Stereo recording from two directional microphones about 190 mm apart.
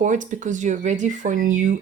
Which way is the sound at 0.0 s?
40° right (ahead or behind).